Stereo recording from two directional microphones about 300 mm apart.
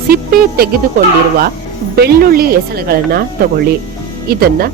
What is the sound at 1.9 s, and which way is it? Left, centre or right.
A woman's voice, right.